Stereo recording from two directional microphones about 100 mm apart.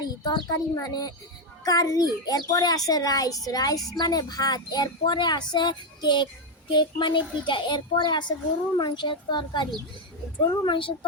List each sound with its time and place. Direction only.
0.0 s a child's voice: 40° left (ahead or behind); by 10.9 s 55° left (ahead or behind)